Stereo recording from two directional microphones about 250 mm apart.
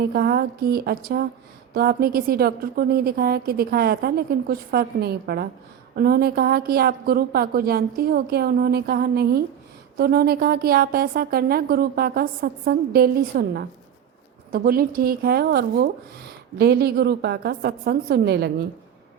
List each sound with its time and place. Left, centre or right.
0.1 s a woman's voice: right